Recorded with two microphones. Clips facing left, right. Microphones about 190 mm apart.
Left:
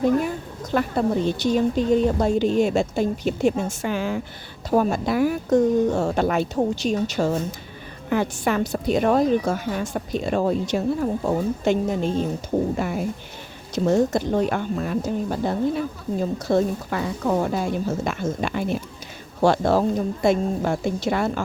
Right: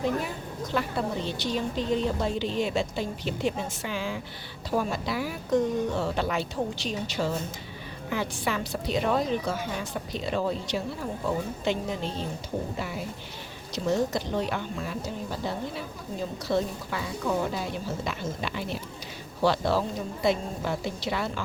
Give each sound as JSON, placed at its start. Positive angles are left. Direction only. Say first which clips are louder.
{"t": 0.7, "sound": "a woman's voice", "louder": "left 8 dB", "side_deg": 50}